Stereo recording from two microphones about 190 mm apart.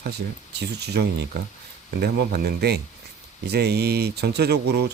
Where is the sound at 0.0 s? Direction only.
60° right (ahead or behind).